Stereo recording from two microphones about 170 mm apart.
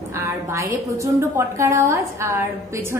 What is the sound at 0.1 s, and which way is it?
A woman's voice, 15° right (ahead or behind).